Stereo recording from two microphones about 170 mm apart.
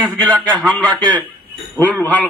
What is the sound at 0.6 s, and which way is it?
A man's voice, 5° left (ahead or behind).